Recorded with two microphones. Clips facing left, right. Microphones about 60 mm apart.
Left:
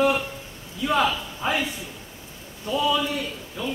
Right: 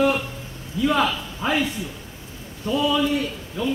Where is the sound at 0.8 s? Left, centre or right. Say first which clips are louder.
Right 2 dB; centre.